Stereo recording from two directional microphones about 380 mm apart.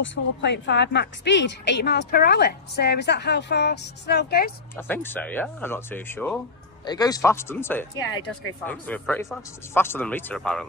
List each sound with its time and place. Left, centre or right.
0.0 s a woman's voice: left
4.7 s speech: centre